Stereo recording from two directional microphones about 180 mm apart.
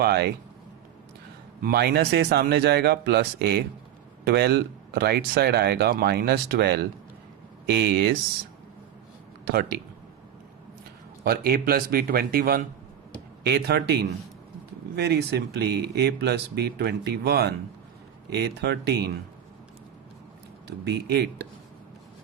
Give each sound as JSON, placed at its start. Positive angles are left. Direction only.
{"t": 0.0, "sound": "speech", "side_deg": -60}
{"t": 1.6, "sound": "speech", "side_deg": -60}
{"t": 9.4, "sound": "speech", "side_deg": -60}
{"t": 11.2, "sound": "speech", "side_deg": -60}
{"t": 20.8, "sound": "speech", "side_deg": -65}